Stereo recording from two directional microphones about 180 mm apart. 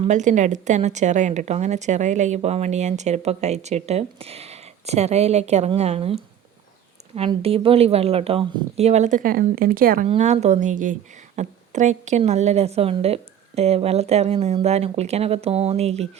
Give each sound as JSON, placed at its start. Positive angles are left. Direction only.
{"t": 0.0, "sound": "a woman's voice", "side_deg": -40}
{"t": 10.1, "sound": "a woman's voice", "side_deg": -35}